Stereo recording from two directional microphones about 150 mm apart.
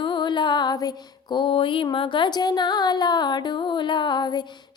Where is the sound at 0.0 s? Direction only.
30° left (ahead or behind).